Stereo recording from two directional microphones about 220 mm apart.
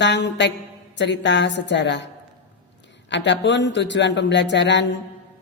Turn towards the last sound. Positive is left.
turn(degrees=55)  # may be behind; listen again after turning